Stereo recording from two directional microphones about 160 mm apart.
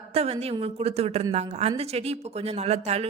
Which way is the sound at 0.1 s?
40° right (ahead or behind).